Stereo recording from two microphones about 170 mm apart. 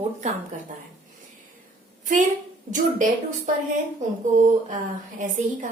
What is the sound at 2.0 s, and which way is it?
Speech, 50° right (ahead or behind).